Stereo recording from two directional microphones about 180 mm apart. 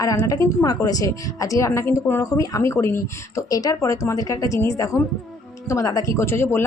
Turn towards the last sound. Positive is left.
turn(degrees=15)  # may be behind; listen again after turning